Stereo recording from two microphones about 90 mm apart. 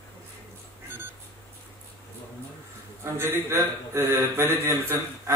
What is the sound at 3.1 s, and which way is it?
A man's voice, 30° right (ahead or behind).